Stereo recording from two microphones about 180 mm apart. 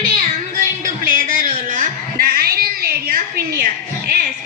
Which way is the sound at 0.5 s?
50° right (ahead or behind).